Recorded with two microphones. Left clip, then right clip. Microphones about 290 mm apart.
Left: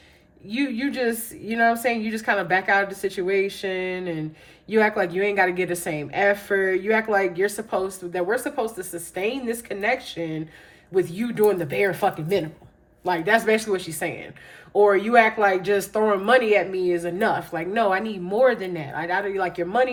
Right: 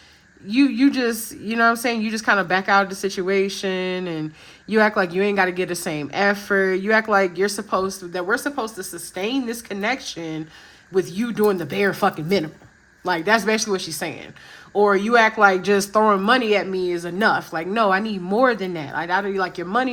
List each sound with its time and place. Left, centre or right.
0.4 s speech: centre